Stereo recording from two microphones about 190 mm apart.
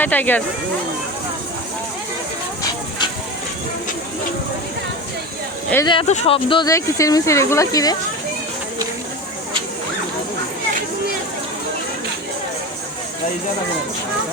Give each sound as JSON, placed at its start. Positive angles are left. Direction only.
{"t": 0.0, "sound": "speech", "side_deg": 10}
{"t": 5.8, "sound": "speech", "side_deg": 25}